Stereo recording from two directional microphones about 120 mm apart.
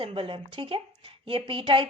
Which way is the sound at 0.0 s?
45° right (ahead or behind).